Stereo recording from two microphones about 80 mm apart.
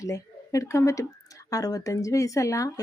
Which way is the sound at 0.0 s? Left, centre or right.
Left.